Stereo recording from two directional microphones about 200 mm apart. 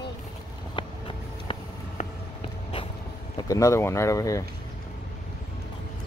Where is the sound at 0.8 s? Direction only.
25° left (ahead or behind).